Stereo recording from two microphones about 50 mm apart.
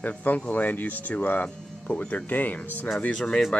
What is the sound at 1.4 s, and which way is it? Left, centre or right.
Speech, left.